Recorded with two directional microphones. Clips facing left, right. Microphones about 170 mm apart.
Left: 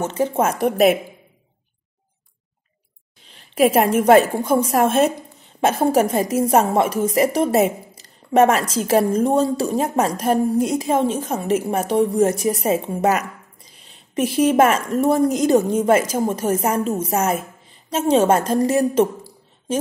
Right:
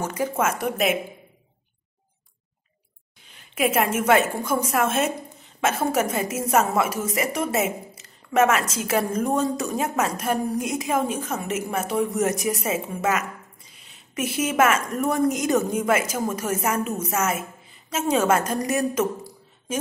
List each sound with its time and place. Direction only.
0.0 s a woman's voice: 25° left (ahead or behind)
3.3 s a woman's voice: 30° left (ahead or behind)